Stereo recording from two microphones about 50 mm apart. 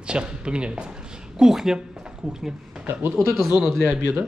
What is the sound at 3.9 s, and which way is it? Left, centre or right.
Speech, right.